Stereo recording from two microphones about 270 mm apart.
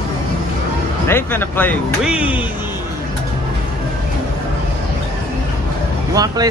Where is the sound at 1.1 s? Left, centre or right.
Centre.